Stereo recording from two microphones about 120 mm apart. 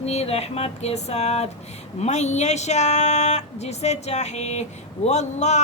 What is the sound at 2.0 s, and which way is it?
Speech, 70° left (ahead or behind).